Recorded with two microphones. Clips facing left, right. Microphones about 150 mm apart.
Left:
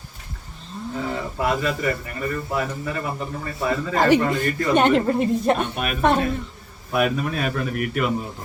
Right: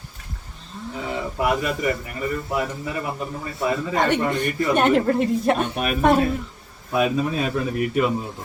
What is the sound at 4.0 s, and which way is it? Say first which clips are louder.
Speech: left 4 dB; centre (ahead or behind).